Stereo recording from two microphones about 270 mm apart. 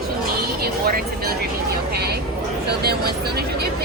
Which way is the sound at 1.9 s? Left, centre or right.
Right.